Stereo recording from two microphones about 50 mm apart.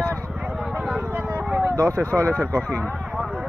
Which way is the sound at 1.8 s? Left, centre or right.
Right.